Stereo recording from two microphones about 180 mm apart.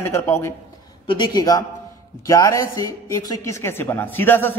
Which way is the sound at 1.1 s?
25° left (ahead or behind).